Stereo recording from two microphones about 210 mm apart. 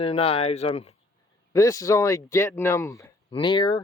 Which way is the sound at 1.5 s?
15° left (ahead or behind).